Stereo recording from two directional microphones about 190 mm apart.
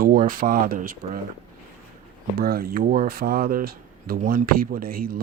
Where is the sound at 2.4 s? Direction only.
50° right (ahead or behind).